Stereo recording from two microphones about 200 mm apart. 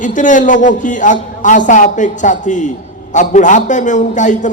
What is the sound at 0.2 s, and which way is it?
A man's voice, 40° left (ahead or behind).